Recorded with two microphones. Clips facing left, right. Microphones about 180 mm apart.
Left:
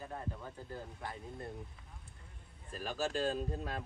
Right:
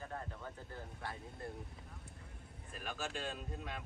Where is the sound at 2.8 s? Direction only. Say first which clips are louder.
Left 8 dB; 35° left (ahead or behind).